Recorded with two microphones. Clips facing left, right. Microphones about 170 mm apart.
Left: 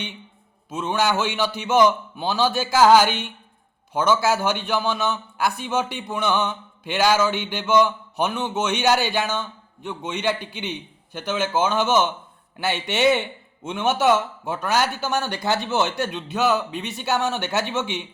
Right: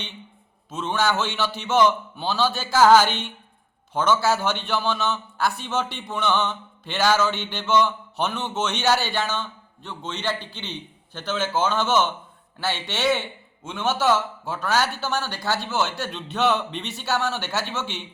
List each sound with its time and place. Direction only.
0.7 s a man's voice: 10° left (ahead or behind)